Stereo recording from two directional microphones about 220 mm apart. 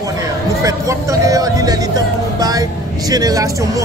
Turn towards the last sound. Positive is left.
turn(degrees=-15)  # may be behind; listen again after turning